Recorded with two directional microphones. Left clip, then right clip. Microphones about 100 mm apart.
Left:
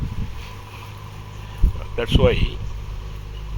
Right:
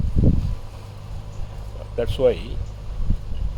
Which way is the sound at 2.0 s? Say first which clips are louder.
Even; 65° right (ahead or behind).